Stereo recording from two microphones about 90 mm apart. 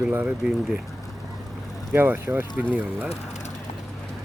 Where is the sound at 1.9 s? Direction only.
25° right (ahead or behind).